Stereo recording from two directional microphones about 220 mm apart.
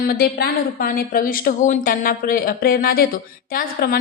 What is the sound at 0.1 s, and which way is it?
A woman's voice, 45° left (ahead or behind).